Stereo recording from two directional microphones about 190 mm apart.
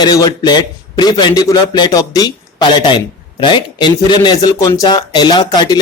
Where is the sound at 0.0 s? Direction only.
20° left (ahead or behind).